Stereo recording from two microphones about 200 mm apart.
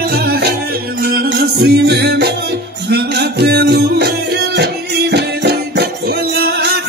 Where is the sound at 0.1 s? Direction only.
50° right (ahead or behind).